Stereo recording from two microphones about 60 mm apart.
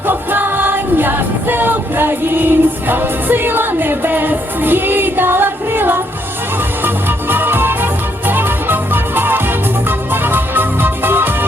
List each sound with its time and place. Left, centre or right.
0.1 s music: right